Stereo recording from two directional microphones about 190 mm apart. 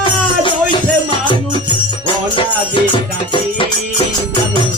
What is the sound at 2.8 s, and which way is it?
Music, 25° left (ahead or behind).